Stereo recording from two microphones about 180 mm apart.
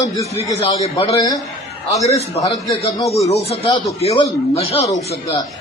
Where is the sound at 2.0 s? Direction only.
35° left (ahead or behind).